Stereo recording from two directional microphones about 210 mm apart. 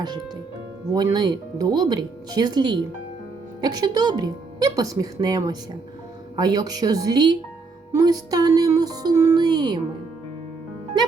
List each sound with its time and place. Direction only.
0.9 s a woman's voice: 20° right (ahead or behind)